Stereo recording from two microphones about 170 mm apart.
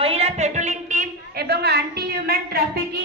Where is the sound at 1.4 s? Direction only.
75° right (ahead or behind).